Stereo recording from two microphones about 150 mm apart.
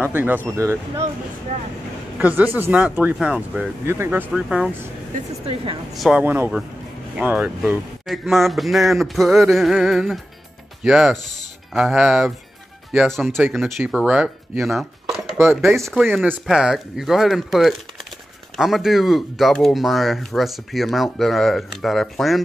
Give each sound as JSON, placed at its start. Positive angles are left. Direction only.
{"t": 0.0, "sound": "speech", "side_deg": -10}
{"t": 2.1, "sound": "speech", "side_deg": -10}
{"t": 4.3, "sound": "speech", "side_deg": -5}
{"t": 5.9, "sound": "speech", "side_deg": -5}
{"t": 13.4, "sound": "chopping", "side_deg": 0}
{"t": 15.5, "sound": "speech", "side_deg": 0}